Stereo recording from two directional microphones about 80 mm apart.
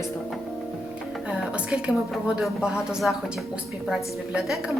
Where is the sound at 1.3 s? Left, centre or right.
Centre.